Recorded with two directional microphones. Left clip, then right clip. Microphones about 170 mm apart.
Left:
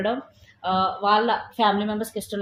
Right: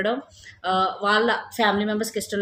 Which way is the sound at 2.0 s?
90° right.